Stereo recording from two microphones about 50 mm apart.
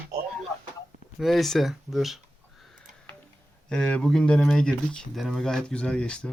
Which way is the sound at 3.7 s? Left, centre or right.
Left.